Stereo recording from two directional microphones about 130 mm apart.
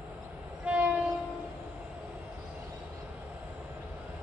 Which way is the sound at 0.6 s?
10° right (ahead or behind).